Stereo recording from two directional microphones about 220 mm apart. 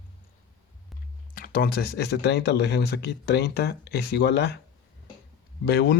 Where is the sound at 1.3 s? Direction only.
40° left (ahead or behind).